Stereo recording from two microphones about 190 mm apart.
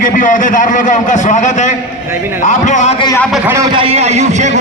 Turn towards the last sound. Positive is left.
turn(degrees=-40)  # may be behind; listen again after turning